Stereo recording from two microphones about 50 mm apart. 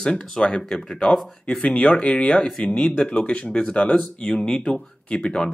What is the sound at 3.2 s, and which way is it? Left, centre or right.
Speech, left.